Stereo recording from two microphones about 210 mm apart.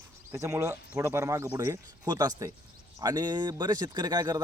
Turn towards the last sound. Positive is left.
turn(degrees=-20)  # may be behind; listen again after turning